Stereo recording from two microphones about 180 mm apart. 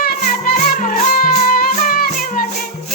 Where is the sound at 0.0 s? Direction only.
55° left (ahead or behind).